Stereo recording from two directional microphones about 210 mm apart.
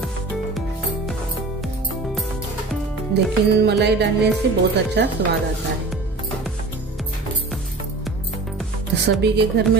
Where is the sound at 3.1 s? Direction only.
50° right (ahead or behind).